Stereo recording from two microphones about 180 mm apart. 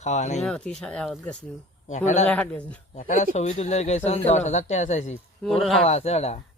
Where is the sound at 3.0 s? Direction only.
40° left (ahead or behind).